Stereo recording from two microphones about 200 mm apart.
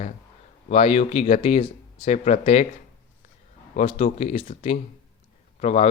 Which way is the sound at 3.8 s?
35° left (ahead or behind).